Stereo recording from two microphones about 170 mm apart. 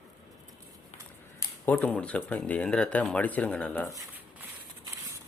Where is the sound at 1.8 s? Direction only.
5° left (ahead or behind).